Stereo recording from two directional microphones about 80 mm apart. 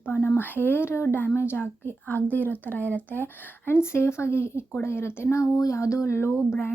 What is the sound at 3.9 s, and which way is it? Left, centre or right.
Speech, left.